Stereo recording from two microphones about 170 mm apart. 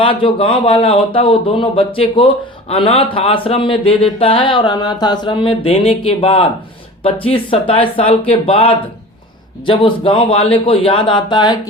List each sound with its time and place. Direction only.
0.0 s speech: 30° left (ahead or behind)